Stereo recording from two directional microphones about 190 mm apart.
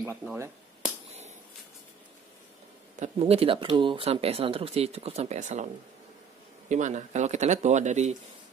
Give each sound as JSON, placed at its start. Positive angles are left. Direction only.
{"t": 0.1, "sound": "speech", "side_deg": -5}
{"t": 3.0, "sound": "speech", "side_deg": -30}
{"t": 6.7, "sound": "speech", "side_deg": -40}